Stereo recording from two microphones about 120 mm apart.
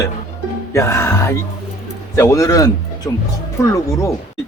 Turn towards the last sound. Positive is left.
turn(degrees=25)  # may be behind; listen again after turning